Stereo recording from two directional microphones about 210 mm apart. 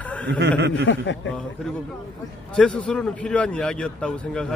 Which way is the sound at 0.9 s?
60° left (ahead or behind).